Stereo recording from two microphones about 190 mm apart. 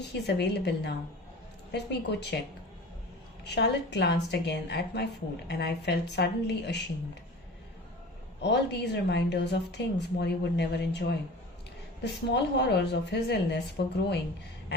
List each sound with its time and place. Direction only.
0.1 s a woman's voice: 60° left (ahead or behind)
3.4 s a woman's voice: 65° left (ahead or behind)
8.4 s a woman's voice: 65° left (ahead or behind)
12.3 s a woman's voice: 65° left (ahead or behind)